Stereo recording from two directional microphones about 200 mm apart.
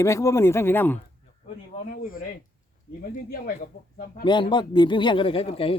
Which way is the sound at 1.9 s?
45° left (ahead or behind).